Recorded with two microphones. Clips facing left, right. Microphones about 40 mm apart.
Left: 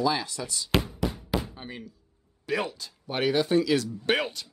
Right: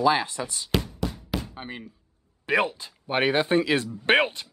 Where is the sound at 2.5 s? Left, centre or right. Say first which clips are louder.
Right 5 dB; right.